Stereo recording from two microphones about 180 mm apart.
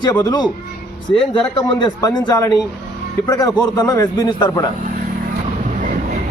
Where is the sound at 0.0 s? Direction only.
20° left (ahead or behind).